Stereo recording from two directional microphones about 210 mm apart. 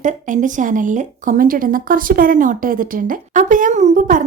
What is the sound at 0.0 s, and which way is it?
A woman's voice, 35° right (ahead or behind).